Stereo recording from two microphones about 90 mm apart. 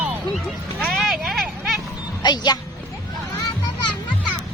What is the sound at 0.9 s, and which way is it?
Vehicle, centre (ahead or behind).